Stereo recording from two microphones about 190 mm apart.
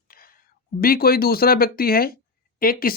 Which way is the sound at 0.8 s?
50° left (ahead or behind).